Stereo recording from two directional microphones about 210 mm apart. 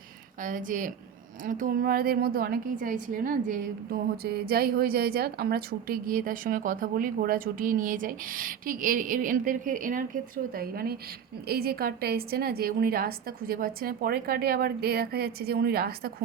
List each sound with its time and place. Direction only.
0.4 s a woman's voice: 40° right (ahead or behind)